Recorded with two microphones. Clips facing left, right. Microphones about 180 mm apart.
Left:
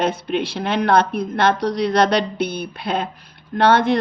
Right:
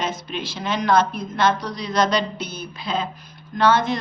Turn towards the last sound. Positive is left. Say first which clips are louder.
# left 3 dB
turn(degrees=60)  # may be behind; listen again after turning